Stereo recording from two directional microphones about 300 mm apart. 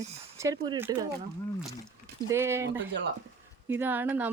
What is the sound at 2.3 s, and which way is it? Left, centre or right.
Speech, centre.